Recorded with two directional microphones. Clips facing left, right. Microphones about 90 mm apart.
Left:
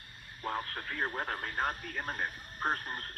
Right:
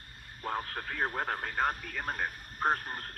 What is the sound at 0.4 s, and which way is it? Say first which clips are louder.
Speech: right 1 dB; 45° right (ahead or behind).